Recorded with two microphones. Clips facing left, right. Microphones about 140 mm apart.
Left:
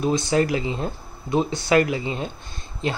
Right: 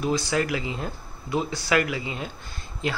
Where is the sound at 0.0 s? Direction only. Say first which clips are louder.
Left 4 dB; 25° left (ahead or behind).